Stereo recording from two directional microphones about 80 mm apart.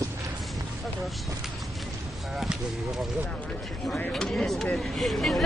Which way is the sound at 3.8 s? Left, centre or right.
Centre.